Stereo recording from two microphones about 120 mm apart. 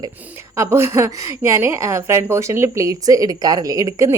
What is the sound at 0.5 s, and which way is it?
Speech, 25° right (ahead or behind).